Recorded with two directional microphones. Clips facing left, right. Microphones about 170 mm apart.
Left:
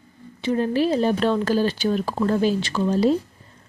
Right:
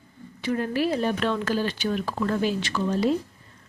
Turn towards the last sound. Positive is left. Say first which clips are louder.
# left 4 dB
turn(degrees=30)  # may be behind; listen again after turning